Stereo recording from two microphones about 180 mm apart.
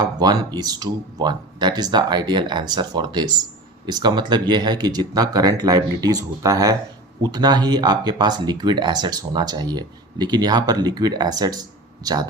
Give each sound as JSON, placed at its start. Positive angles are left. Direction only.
{"t": 0.0, "sound": "speech", "side_deg": -20}